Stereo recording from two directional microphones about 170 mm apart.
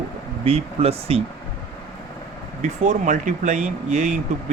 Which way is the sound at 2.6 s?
45° right (ahead or behind).